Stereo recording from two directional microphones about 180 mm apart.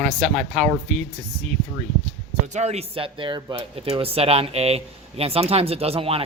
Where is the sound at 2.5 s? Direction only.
35° right (ahead or behind).